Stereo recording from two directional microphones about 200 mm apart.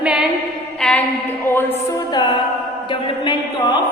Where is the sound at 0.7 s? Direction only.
5° left (ahead or behind).